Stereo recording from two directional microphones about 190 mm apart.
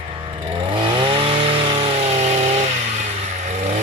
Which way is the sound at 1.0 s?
30° right (ahead or behind).